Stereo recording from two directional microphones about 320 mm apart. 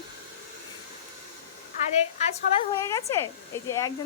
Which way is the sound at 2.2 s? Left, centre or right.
Centre.